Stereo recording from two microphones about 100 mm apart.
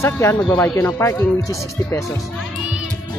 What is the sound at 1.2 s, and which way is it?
Speech, 30° left (ahead or behind).